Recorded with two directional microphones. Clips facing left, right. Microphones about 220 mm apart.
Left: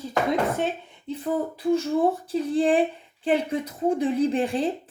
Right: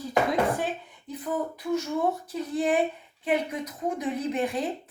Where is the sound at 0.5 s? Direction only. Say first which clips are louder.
Left 3 dB; 25° left (ahead or behind).